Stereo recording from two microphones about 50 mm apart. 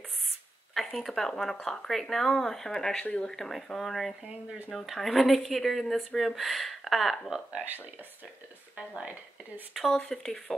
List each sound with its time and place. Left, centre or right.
0.7 s speech: centre
3.0 s speech: left
3.3 s speech: centre
7.5 s speech: right
9.9 s speech: centre